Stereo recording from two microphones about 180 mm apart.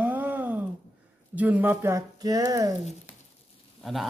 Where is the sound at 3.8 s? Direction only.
Centre (ahead or behind).